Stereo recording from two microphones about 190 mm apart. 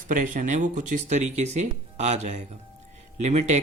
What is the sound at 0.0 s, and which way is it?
Speech, 40° right (ahead or behind).